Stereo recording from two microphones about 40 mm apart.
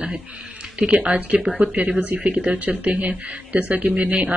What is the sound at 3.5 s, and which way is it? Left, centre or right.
Speech, right.